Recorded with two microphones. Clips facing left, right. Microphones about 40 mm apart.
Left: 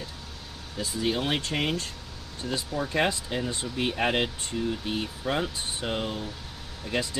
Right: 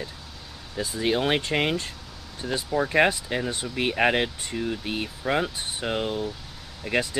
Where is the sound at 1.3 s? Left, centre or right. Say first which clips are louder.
Right 4 dB; right; by 6.3 s centre.